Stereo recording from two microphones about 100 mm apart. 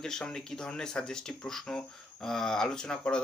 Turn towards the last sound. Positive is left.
turn(degrees=10)  # may be behind; listen again after turning